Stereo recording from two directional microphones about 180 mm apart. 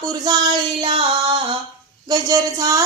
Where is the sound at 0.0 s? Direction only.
20° right (ahead or behind).